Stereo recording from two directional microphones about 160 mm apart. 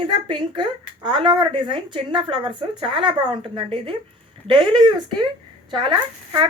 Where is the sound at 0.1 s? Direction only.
30° right (ahead or behind).